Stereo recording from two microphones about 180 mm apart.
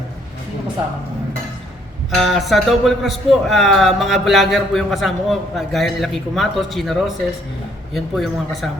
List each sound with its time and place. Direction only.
2.0 s a man's voice: centre (ahead or behind)
7.9 s a man's voice: centre (ahead or behind)